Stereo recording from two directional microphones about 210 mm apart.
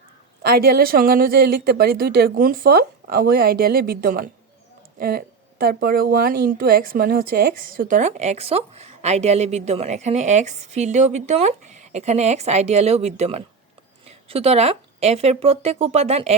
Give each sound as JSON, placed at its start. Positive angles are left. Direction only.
{"t": 0.4, "sound": "a woman's voice", "side_deg": -45}